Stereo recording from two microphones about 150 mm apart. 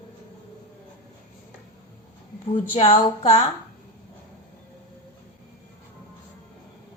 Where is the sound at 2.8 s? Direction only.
45° left (ahead or behind).